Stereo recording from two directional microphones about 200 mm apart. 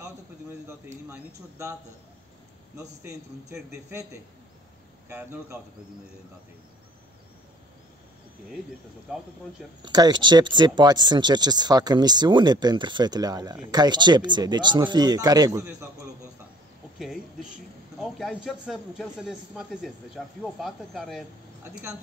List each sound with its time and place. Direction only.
1.1 s a man's voice: 15° right (ahead or behind)
2.8 s a man's voice: 15° right (ahead or behind)
5.1 s a man's voice: 5° right (ahead or behind)
9.1 s a man's voice: 5° right (ahead or behind)
9.8 s speech: 20° right (ahead or behind)
17.0 s a man's voice: centre (ahead or behind)